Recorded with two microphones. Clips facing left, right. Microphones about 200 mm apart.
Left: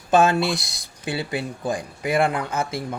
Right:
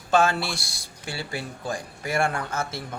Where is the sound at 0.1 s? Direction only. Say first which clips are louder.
Left 4 dB; 20° left (ahead or behind).